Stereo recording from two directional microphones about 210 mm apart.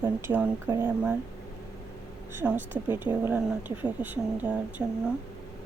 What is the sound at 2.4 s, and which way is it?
Speech, 10° right (ahead or behind).